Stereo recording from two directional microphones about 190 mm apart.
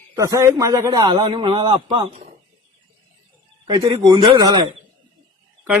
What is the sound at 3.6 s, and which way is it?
A man's voice, 25° right (ahead or behind).